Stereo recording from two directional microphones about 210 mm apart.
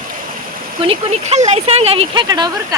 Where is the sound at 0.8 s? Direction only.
30° right (ahead or behind).